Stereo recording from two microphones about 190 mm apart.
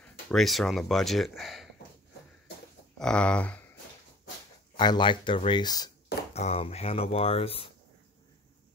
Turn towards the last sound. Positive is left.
turn(degrees=30)  # may be behind; listen again after turning